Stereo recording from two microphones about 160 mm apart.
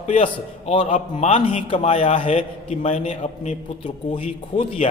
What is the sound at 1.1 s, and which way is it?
A man's voice, 40° left (ahead or behind).